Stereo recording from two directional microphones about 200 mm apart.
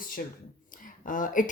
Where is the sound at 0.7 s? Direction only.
40° left (ahead or behind).